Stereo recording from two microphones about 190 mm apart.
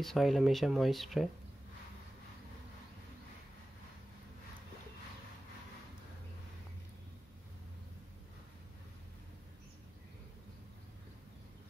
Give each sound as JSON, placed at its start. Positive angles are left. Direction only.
{"t": 0.0, "sound": "speech", "side_deg": 0}